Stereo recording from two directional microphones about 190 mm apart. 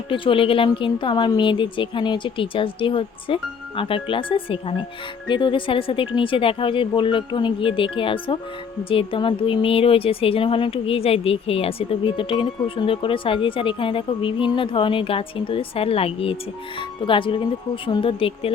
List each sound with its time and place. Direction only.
0.1 s speech: 30° left (ahead or behind)